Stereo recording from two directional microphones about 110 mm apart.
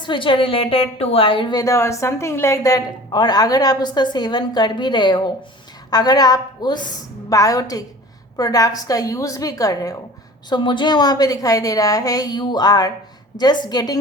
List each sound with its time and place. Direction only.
0.0 s a woman's voice: 50° left (ahead or behind)
1.6 s a woman's voice: 25° left (ahead or behind)
10.5 s a woman's voice: 45° left (ahead or behind)